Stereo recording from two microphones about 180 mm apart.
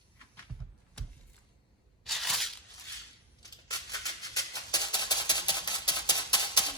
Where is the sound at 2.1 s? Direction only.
Centre (ahead or behind).